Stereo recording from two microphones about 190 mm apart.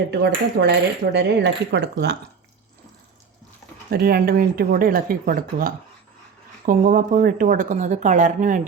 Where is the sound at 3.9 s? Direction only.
50° right (ahead or behind).